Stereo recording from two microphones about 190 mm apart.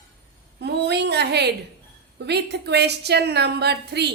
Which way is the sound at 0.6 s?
60° right (ahead or behind).